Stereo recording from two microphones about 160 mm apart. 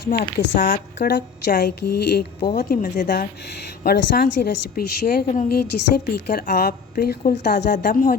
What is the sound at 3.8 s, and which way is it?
Speech, 75° left (ahead or behind).